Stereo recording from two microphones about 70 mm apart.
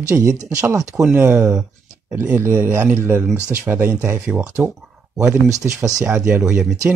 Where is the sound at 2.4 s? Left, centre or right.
Right.